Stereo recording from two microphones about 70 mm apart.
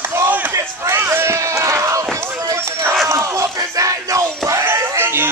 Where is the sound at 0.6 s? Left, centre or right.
Right.